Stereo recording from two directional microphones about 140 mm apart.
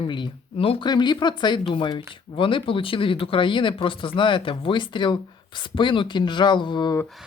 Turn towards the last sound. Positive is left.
turn(degrees=35)  # may be behind; listen again after turning